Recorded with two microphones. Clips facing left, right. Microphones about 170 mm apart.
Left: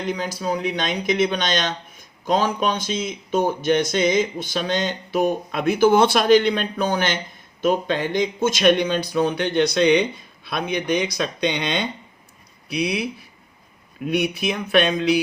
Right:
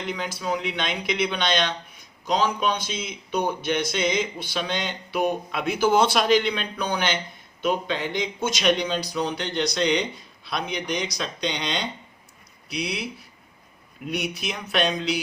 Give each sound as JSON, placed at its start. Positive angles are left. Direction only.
{"t": 0.0, "sound": "speech", "side_deg": 40}
{"t": 14.1, "sound": "speech", "side_deg": 55}